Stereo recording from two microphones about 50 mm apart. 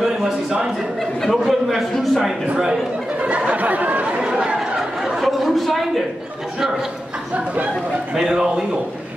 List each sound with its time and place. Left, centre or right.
0.0 s a sound: centre
2.5 s a man's voice: centre
3.2 s chatter: right
4.7 s chatter: centre
8.2 s a man's voice: centre